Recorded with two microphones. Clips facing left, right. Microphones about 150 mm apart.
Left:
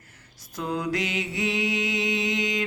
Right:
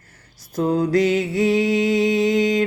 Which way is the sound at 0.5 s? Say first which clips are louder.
Right 10 dB; 30° right (ahead or behind).